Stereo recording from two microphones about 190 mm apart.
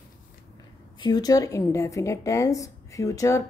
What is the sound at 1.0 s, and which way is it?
A woman's voice, 20° left (ahead or behind).